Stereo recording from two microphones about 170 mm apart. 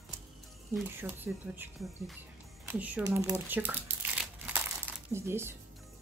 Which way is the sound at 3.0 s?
20° right (ahead or behind).